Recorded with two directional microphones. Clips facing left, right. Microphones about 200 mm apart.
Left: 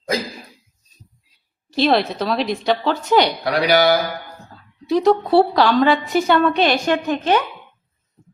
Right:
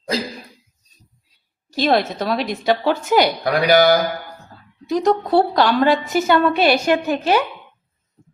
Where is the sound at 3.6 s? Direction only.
45° right (ahead or behind).